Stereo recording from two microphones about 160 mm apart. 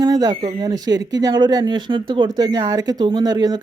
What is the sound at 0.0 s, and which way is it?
Speech, 25° right (ahead or behind).